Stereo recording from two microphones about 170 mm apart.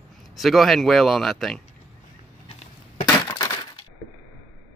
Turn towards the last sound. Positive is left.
turn(degrees=25)  # may be behind; listen again after turning